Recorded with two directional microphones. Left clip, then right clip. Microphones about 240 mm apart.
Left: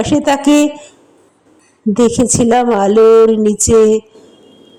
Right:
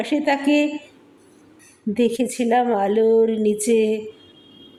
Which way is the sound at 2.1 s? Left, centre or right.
Left.